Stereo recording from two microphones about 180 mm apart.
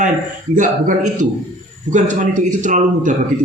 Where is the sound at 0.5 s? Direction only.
45° right (ahead or behind).